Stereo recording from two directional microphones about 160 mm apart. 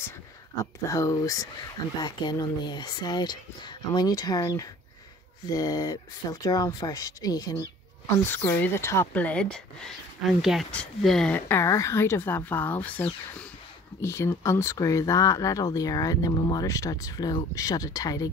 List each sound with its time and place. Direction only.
0.8 s speech: 20° left (ahead or behind)